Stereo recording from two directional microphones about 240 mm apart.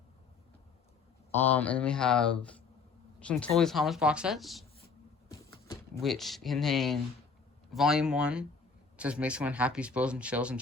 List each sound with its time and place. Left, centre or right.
1.5 s speech: centre
5.3 s a sound: centre
6.0 s speech: centre